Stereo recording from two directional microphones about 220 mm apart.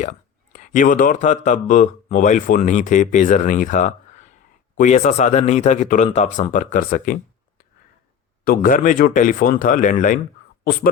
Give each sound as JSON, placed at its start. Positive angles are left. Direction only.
{"t": 0.5, "sound": "speech", "side_deg": 35}
{"t": 8.4, "sound": "speech", "side_deg": 40}